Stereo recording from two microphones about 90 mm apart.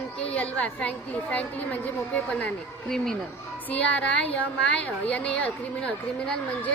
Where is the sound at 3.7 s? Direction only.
15° left (ahead or behind).